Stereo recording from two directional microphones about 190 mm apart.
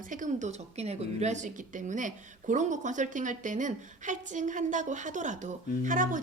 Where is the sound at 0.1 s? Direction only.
40° right (ahead or behind).